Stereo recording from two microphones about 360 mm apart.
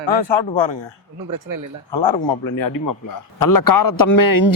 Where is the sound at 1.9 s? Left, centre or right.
Left.